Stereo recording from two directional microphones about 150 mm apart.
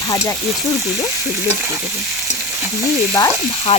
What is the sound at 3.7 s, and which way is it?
Speech, 45° left (ahead or behind).